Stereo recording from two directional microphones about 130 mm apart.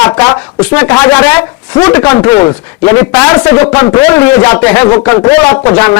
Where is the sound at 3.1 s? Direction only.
10° left (ahead or behind).